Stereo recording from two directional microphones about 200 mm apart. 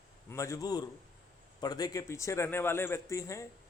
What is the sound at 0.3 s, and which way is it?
A man's voice, 15° left (ahead or behind).